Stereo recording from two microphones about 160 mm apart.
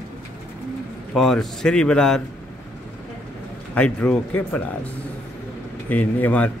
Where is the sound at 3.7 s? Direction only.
10° left (ahead or behind).